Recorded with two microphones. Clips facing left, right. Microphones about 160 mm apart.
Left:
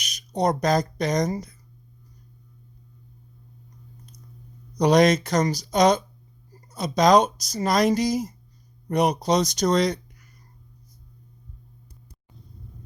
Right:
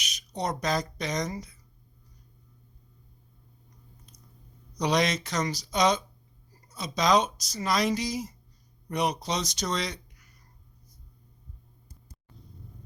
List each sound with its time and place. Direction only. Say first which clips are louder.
0.0 s speech: left 9 dB; 45° left (ahead or behind)
4.8 s speech: left 9 dB; 45° left (ahead or behind)